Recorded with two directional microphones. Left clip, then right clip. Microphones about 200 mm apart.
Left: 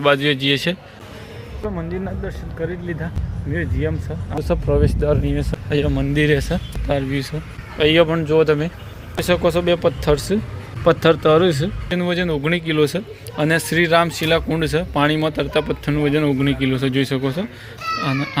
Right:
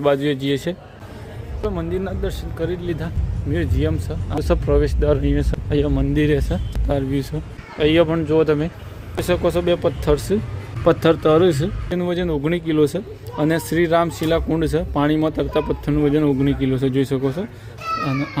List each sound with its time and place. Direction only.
0.0 s speech: 5° right (ahead or behind)
2.2 s speech: 15° right (ahead or behind)
4.4 s a child's voice: 5° right (ahead or behind)